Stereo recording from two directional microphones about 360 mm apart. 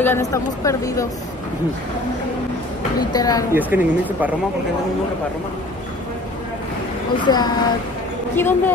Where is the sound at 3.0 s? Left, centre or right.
Centre.